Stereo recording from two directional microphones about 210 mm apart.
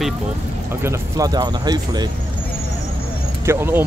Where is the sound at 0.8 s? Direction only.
15° right (ahead or behind).